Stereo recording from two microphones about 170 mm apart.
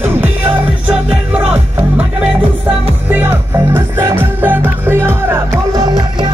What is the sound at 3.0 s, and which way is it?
Music, 10° right (ahead or behind).